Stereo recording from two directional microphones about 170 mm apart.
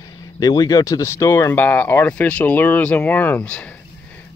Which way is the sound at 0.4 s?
20° left (ahead or behind).